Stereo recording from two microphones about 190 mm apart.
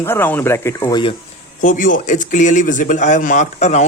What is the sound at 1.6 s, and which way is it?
A man's voice, 45° left (ahead or behind).